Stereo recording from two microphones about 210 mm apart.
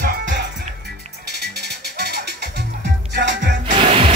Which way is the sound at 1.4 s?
50° right (ahead or behind).